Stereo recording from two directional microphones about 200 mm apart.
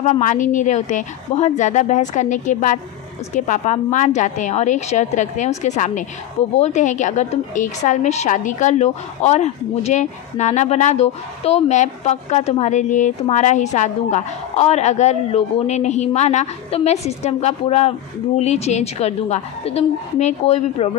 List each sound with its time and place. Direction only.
0.0 s a woman's voice: 35° left (ahead or behind)